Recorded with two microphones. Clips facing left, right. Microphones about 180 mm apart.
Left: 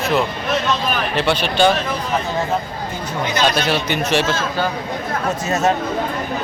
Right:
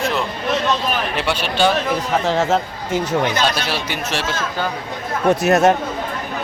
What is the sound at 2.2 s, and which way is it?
Speech, 90° right.